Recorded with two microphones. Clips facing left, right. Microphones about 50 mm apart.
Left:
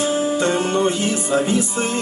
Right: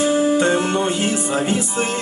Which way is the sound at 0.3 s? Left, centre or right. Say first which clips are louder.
Right 1 dB; right.